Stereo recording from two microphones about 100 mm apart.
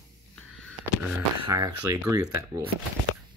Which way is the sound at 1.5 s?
35° right (ahead or behind).